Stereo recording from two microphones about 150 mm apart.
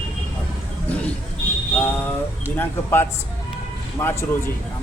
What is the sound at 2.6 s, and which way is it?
Speech, 15° left (ahead or behind).